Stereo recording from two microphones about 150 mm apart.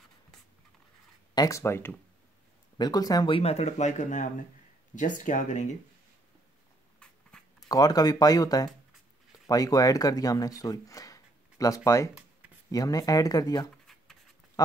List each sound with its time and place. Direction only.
1.3 s speech: 25° left (ahead or behind)
2.8 s speech: 25° left (ahead or behind); by 5.8 s 55° left (ahead or behind)
7.0 s writing: 5° left (ahead or behind)
7.6 s speech: 25° left (ahead or behind)